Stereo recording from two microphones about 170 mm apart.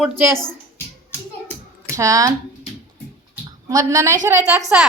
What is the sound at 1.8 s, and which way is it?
Speech, 20° right (ahead or behind).